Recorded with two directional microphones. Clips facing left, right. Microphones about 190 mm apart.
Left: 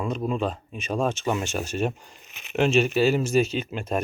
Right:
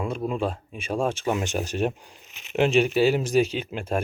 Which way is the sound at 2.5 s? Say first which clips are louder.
Right 1 dB; 15° right (ahead or behind).